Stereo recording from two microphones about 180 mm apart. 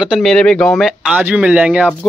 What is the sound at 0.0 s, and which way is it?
Speech, centre (ahead or behind).